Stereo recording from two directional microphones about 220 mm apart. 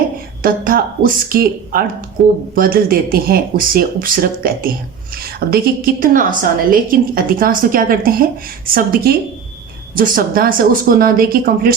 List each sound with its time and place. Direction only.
0.4 s a woman's voice: 40° right (ahead or behind)